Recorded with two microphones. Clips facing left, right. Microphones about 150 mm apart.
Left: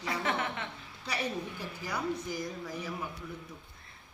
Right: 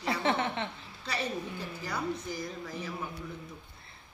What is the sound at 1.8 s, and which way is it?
Speech, 15° left (ahead or behind).